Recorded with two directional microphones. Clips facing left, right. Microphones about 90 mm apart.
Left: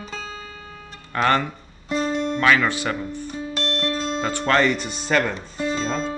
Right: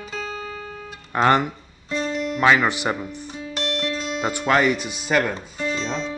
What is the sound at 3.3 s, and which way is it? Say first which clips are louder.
Music: even; 35° left (ahead or behind).